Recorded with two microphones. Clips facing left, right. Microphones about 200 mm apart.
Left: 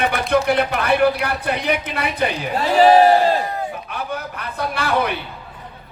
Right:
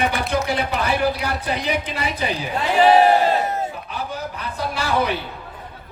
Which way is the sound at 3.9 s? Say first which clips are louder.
Left 1 dB; 60° left (ahead or behind).